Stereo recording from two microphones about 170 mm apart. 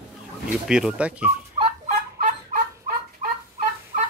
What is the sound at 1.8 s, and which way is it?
Fowl, 50° right (ahead or behind).